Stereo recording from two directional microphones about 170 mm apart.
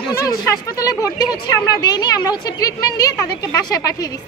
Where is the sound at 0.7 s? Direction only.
20° left (ahead or behind).